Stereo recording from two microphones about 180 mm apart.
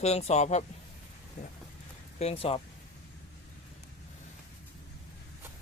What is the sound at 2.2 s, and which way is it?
Speech, 35° left (ahead or behind).